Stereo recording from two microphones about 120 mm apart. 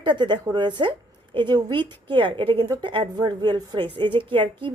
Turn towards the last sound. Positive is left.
turn(degrees=-45)  # may be behind; listen again after turning